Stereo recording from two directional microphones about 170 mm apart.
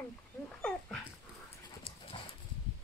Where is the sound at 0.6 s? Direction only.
5° left (ahead or behind).